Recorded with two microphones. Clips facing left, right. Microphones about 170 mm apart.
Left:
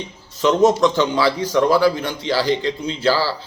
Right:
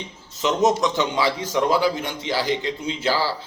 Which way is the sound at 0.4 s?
20° right (ahead or behind).